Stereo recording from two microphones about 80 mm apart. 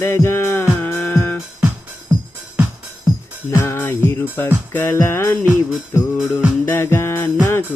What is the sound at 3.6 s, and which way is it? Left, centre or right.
Music, left.